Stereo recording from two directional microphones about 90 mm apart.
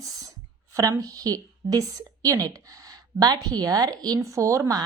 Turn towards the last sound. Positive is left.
turn(degrees=-35)  # may be behind; listen again after turning